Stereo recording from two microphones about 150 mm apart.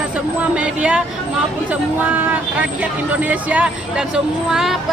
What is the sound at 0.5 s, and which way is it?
Speech, 5° right (ahead or behind).